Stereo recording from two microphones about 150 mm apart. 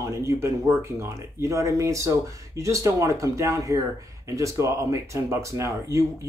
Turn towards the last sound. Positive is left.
turn(degrees=-20)  # may be behind; listen again after turning